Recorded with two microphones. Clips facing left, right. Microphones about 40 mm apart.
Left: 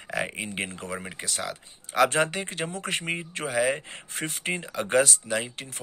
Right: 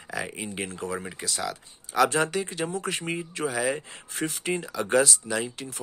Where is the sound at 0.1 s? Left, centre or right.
Left.